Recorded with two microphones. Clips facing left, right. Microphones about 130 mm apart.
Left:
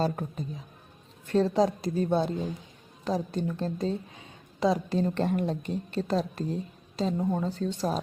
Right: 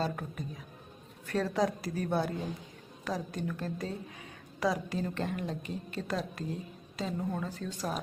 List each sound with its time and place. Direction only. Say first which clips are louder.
0.0 s a woman's voice: left 5 dB; 30° left (ahead or behind)